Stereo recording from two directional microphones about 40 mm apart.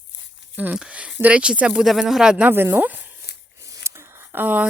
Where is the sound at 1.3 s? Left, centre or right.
Right.